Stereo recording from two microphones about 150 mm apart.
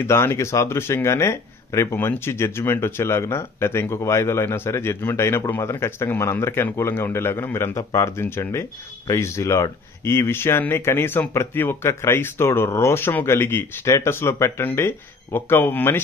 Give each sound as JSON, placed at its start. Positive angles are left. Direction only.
{"t": 0.0, "sound": "speech", "side_deg": 20}